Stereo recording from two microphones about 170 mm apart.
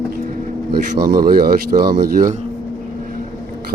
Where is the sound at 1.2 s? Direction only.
60° right (ahead or behind).